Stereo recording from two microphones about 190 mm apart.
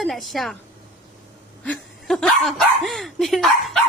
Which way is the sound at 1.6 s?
5° left (ahead or behind).